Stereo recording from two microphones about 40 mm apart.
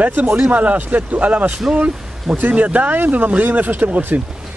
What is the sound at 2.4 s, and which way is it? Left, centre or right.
Speech, right.